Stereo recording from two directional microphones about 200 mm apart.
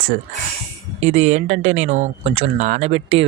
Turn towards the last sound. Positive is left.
turn(degrees=-30)  # may be behind; listen again after turning